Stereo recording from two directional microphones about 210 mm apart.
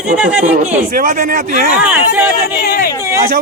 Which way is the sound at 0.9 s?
40° right (ahead or behind).